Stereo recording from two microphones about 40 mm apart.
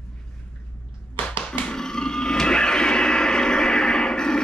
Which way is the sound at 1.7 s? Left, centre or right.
Centre.